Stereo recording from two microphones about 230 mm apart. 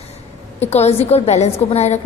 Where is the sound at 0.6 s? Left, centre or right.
Left.